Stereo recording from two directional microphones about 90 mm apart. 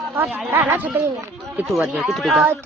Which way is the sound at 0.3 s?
20° right (ahead or behind).